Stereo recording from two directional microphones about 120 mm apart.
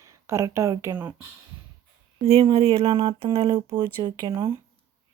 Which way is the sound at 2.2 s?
50° right (ahead or behind).